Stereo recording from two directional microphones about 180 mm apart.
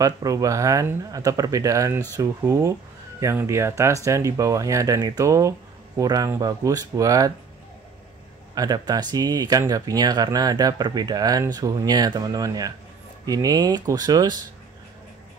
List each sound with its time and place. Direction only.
0.0 s speech: 20° right (ahead or behind)
8.5 s speech: 20° right (ahead or behind)